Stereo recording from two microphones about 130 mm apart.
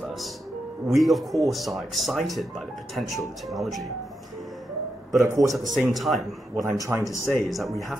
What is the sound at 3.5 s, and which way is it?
Speech, centre (ahead or behind).